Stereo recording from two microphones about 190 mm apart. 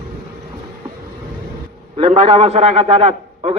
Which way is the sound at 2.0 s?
30° right (ahead or behind).